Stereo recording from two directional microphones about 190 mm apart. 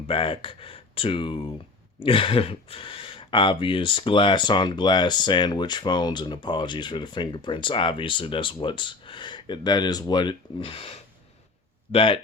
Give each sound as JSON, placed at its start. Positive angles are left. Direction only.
{"t": 0.1, "sound": "speech", "side_deg": 30}